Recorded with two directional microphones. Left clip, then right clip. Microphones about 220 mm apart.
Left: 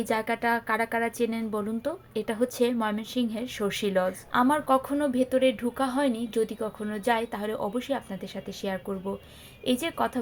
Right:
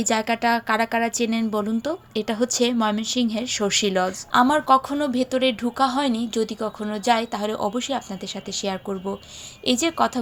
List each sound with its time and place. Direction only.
0.0 s a woman's voice: 35° right (ahead or behind)